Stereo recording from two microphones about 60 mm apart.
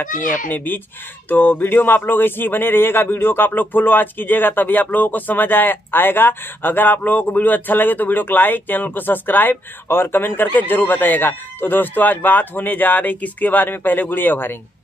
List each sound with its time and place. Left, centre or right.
0.0 s speech: left